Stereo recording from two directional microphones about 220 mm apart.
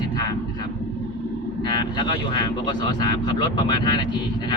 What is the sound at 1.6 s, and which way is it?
Speech, 20° left (ahead or behind).